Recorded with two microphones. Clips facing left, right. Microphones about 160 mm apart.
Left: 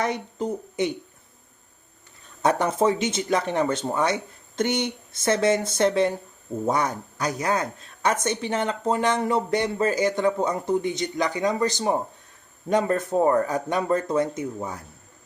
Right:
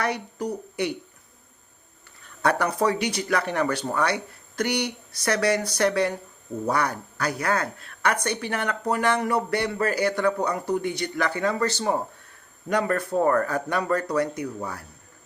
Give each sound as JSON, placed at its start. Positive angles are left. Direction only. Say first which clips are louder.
{"t": 0.0, "sound": "speech", "louder": "left 1 dB", "side_deg": 20}
{"t": 2.4, "sound": "speech", "louder": "left 2 dB", "side_deg": 20}